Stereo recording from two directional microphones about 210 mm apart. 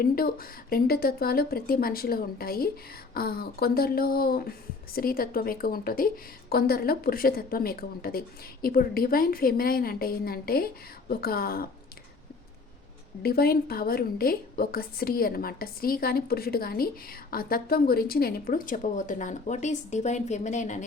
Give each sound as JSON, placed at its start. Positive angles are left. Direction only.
{"t": 0.0, "sound": "a woman's voice", "side_deg": 45}
{"t": 13.2, "sound": "a woman's voice", "side_deg": 45}